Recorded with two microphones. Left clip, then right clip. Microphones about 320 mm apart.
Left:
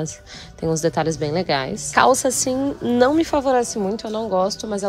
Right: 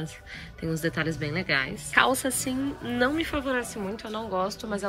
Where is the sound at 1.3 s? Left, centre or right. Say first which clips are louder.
Left 6 dB; centre.